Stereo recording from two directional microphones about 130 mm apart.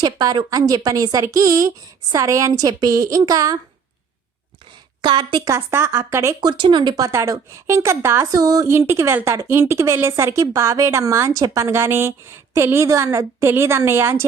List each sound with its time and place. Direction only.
0.0 s a woman's voice: 35° right (ahead or behind)
5.0 s a woman's voice: 40° right (ahead or behind)
5.5 s a woman's voice: 20° right (ahead or behind)
6.4 s a woman's voice: 35° right (ahead or behind); by 14.3 s 20° right (ahead or behind)